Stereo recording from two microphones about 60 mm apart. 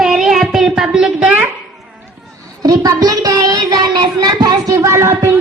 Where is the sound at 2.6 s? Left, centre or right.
Right.